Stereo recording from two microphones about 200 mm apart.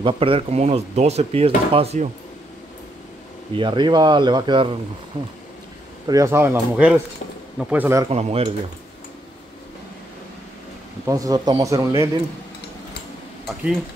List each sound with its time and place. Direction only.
0.0 s speech: 25° right (ahead or behind)
3.5 s speech: 25° right (ahead or behind)
6.0 s a man's voice: 15° right (ahead or behind)
8.1 s speech: 30° right (ahead or behind)
11.1 s a man's voice: 15° right (ahead or behind)